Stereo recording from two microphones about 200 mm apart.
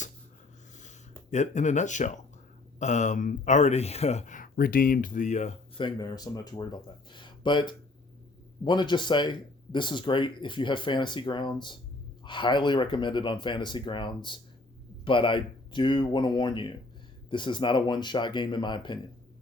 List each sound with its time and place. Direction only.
1.3 s speech: 35° left (ahead or behind)